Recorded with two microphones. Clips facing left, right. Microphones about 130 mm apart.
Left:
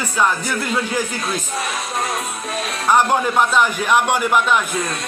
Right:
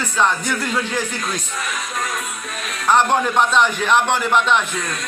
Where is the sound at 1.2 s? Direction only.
30° left (ahead or behind).